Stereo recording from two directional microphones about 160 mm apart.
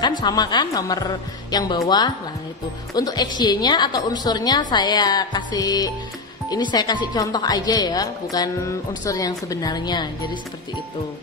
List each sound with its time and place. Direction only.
0.0 s a woman's voice: 25° left (ahead or behind)